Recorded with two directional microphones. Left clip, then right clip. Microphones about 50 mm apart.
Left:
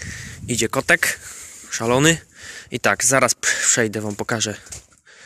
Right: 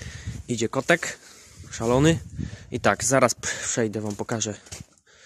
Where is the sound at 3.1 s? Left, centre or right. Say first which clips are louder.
Left 4 dB; right.